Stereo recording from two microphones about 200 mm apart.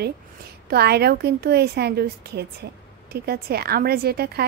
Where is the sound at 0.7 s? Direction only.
50° right (ahead or behind).